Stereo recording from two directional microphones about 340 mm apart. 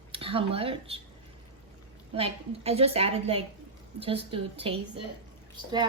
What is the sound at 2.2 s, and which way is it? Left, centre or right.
Child singing, centre.